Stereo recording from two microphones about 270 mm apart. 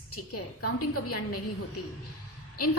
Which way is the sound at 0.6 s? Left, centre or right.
Left.